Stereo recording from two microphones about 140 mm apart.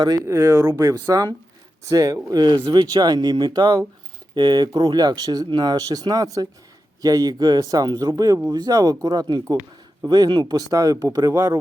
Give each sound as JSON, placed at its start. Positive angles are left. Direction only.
{"t": 0.0, "sound": "speech", "side_deg": -25}